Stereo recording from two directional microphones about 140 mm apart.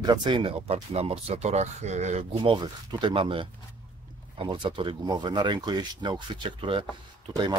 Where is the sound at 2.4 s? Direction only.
30° right (ahead or behind).